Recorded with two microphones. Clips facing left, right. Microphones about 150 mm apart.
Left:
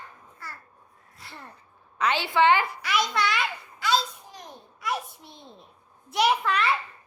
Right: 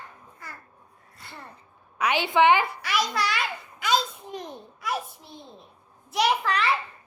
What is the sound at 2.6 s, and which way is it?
Speech, centre (ahead or behind).